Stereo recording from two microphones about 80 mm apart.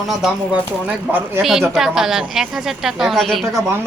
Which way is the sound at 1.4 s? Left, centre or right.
Centre.